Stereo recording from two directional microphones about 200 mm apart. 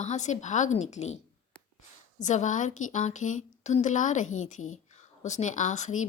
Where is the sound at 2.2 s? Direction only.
35° left (ahead or behind).